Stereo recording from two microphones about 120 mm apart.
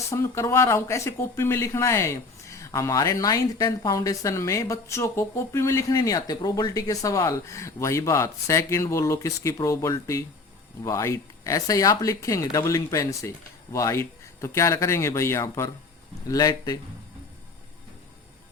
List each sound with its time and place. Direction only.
0.1 s a man's voice: 25° left (ahead or behind)